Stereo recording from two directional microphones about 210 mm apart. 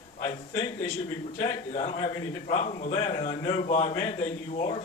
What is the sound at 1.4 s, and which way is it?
Speech, 35° left (ahead or behind).